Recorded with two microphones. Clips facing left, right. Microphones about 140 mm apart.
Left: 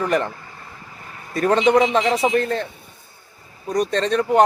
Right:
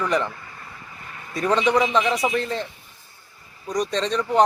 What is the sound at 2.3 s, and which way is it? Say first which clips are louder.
Speech: left 5 dB; 55° left (ahead or behind).